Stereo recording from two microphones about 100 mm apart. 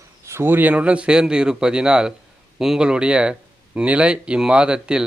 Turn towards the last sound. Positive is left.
turn(degrees=-10)  # may be behind; listen again after turning